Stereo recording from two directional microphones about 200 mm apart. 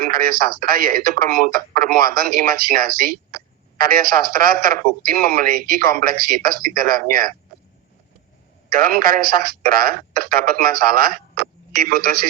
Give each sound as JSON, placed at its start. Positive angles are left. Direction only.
{"t": 0.0, "sound": "speech", "side_deg": -45}
{"t": 8.7, "sound": "speech", "side_deg": -45}